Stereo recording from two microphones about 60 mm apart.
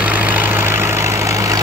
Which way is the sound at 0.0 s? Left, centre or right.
Right.